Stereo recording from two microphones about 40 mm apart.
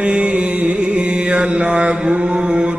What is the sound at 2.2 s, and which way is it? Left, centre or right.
Mantra, right.